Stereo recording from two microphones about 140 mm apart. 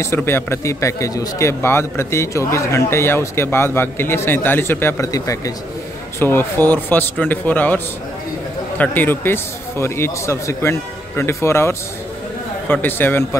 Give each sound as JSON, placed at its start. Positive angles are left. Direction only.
{"t": 0.0, "sound": "a man's voice", "side_deg": 15}